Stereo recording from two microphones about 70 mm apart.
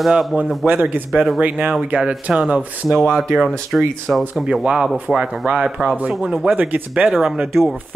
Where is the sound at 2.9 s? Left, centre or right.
Centre.